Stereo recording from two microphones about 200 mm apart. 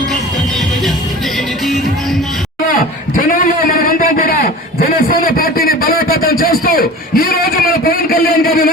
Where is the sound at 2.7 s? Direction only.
40° left (ahead or behind).